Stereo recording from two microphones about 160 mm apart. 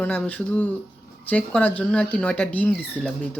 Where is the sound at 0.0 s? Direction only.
10° left (ahead or behind).